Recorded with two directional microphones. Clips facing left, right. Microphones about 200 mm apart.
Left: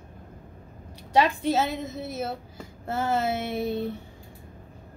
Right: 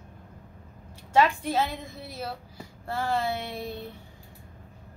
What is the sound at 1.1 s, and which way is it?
A woman's voice, 20° left (ahead or behind).